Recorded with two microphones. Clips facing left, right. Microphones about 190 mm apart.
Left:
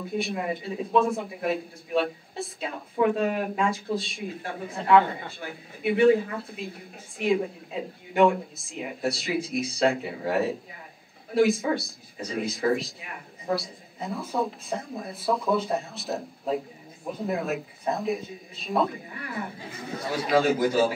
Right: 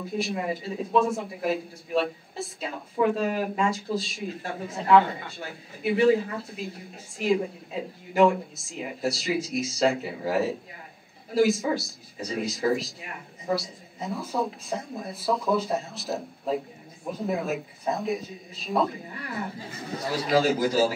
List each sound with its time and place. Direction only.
0.0 s speech: centre (ahead or behind)
20.1 s a man's voice: 55° left (ahead or behind)